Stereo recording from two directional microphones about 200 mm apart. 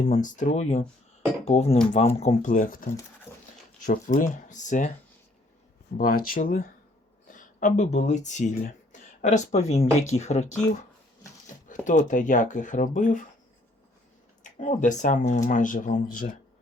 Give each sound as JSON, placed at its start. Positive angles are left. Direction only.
{"t": 0.1, "sound": "speech", "side_deg": 40}
{"t": 3.3, "sound": "dog", "side_deg": 10}
{"t": 3.8, "sound": "speech", "side_deg": 40}
{"t": 6.0, "sound": "speech", "side_deg": 45}
{"t": 11.7, "sound": "speech", "side_deg": 40}
{"t": 14.4, "sound": "speech", "side_deg": 40}